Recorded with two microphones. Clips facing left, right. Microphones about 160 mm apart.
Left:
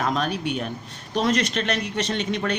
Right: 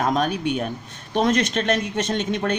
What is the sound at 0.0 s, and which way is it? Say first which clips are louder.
Speech: right 3 dB; 45° right (ahead or behind).